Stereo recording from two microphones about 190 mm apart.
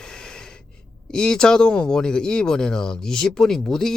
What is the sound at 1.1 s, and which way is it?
Speech, 5° left (ahead or behind).